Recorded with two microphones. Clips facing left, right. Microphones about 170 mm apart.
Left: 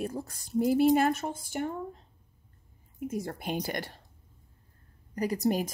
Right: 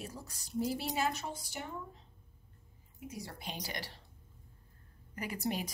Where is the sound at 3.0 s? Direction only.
50° left (ahead or behind).